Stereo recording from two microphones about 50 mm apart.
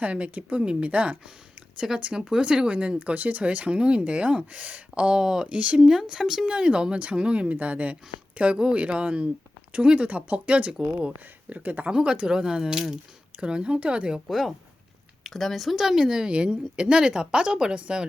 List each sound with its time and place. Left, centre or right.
0.0 s speech: right
2.1 s speech: centre
5.1 s a woman's voice: centre
5.5 s speech: right
5.8 s a woman's voice: centre; by 11.9 s right
11.9 s a woman's voice: centre
13.4 s speech: centre
14.3 s a woman's voice: centre